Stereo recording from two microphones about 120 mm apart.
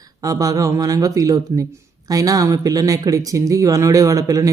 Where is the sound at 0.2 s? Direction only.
30° right (ahead or behind).